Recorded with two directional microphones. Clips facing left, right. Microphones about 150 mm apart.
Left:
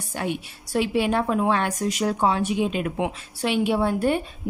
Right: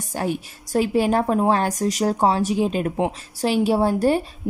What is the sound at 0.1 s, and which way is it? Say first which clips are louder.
A woman's voice: right 3 dB; 40° right (ahead or behind).